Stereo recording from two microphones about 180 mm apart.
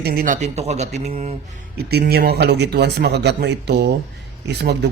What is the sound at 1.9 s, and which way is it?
Speech, 60° right (ahead or behind).